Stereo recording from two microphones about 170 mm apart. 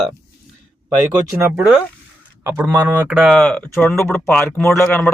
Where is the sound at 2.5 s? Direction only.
15° right (ahead or behind).